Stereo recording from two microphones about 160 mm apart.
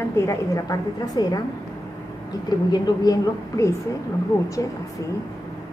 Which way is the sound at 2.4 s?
25° left (ahead or behind).